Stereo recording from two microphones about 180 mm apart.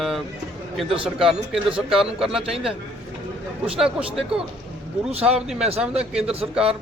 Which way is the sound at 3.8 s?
5° right (ahead or behind).